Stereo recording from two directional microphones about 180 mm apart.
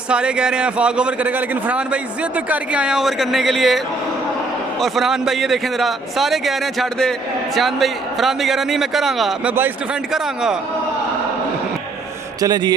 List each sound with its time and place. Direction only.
0.1 s a man's voice: 5° right (ahead or behind)
4.8 s a man's voice: centre (ahead or behind)
12.4 s speech: 20° right (ahead or behind)